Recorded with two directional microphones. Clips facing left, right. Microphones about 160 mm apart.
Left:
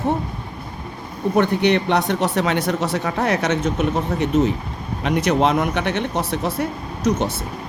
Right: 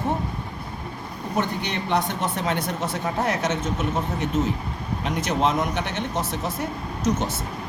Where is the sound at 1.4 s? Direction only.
65° left (ahead or behind).